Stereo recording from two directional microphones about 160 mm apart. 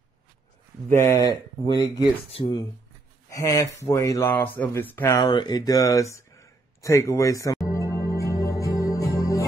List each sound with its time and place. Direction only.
0.9 s speech: 20° left (ahead or behind)
2.2 s speech: 35° left (ahead or behind)
3.3 s speech: 20° left (ahead or behind)
4.8 s a sound: 15° left (ahead or behind)